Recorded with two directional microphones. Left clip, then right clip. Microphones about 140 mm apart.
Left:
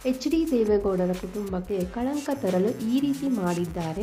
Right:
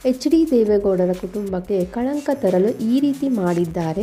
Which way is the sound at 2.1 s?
Centre (ahead or behind).